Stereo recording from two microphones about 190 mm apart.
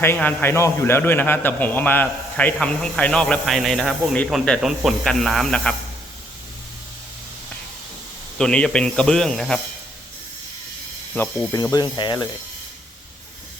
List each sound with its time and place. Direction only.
0.0 s a man's voice: 10° left (ahead or behind)
8.4 s a man's voice: 5° left (ahead or behind)
11.1 s a man's voice: 5° left (ahead or behind)
11.5 s speech: 20° left (ahead or behind)